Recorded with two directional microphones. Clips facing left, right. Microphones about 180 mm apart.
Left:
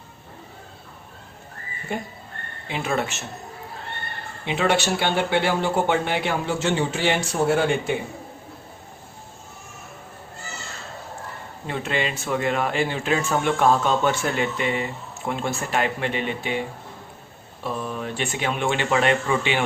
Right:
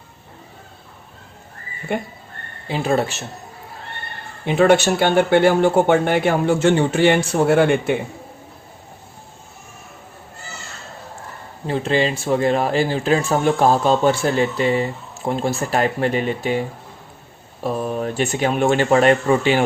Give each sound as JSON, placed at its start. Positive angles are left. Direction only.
{"t": 1.9, "sound": "speech", "side_deg": -65}
{"t": 2.6, "sound": "speech", "side_deg": -35}
{"t": 4.4, "sound": "speech", "side_deg": -50}
{"t": 11.6, "sound": "speech", "side_deg": -30}